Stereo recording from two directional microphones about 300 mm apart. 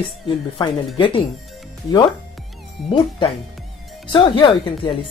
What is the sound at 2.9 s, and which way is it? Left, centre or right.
Speech, centre.